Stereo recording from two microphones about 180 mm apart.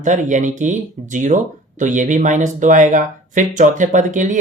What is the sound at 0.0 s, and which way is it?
Speech, 45° right (ahead or behind).